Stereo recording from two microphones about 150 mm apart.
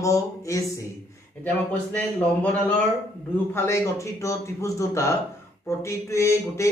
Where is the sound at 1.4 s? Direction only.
10° left (ahead or behind).